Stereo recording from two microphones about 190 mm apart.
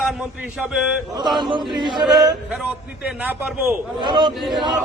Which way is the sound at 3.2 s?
10° right (ahead or behind).